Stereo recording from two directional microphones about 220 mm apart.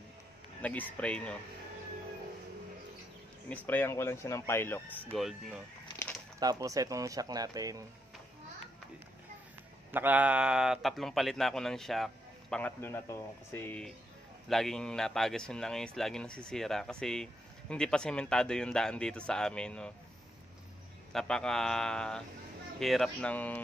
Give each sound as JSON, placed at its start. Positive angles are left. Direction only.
{"t": 0.6, "sound": "a man's voice", "side_deg": 5}
{"t": 3.4, "sound": "speech", "side_deg": 10}
{"t": 5.9, "sound": "bird", "side_deg": 10}
{"t": 6.4, "sound": "speech", "side_deg": -15}
{"t": 9.8, "sound": "a man's voice", "side_deg": -10}
{"t": 21.1, "sound": "a man's voice", "side_deg": 0}